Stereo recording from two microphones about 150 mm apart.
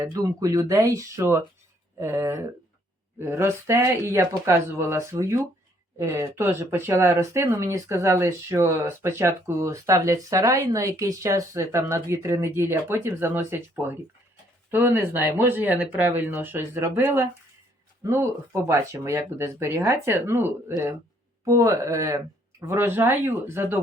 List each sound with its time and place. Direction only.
0.0 s speech: 20° right (ahead or behind)